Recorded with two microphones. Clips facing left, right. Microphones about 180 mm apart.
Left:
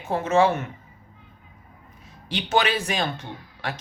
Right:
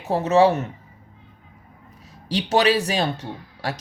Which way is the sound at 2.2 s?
35° right (ahead or behind).